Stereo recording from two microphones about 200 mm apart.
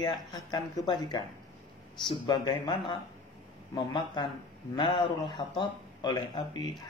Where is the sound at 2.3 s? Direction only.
20° left (ahead or behind).